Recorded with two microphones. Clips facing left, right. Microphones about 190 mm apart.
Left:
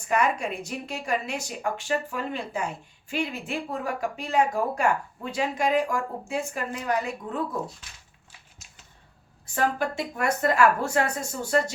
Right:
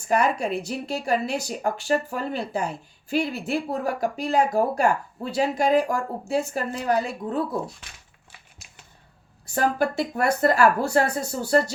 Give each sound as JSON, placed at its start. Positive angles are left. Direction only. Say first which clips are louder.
{"t": 0.1, "sound": "speech", "louder": "right 3 dB", "side_deg": -35}
{"t": 9.6, "sound": "speech", "louder": "right 3 dB", "side_deg": -35}